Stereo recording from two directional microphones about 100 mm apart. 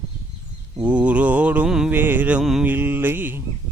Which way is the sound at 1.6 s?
5° right (ahead or behind).